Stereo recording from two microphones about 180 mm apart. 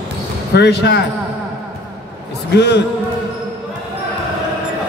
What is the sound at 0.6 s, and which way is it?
Speech, 70° left (ahead or behind).